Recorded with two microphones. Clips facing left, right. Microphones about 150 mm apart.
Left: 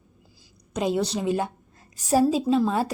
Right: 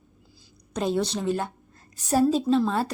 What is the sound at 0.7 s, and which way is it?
A woman's voice, 10° left (ahead or behind).